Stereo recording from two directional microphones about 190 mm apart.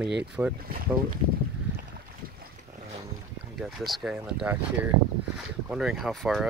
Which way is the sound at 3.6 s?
Centre (ahead or behind).